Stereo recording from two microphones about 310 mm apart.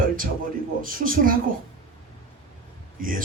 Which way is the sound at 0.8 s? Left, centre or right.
Right.